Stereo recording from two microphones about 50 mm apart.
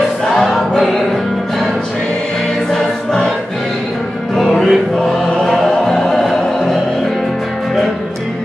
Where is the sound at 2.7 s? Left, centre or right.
Centre.